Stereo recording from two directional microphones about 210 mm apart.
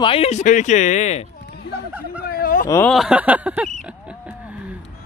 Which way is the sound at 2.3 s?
45° left (ahead or behind).